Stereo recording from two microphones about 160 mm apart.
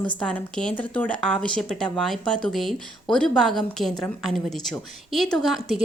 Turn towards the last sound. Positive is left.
turn(degrees=0)  # may be behind; listen again after turning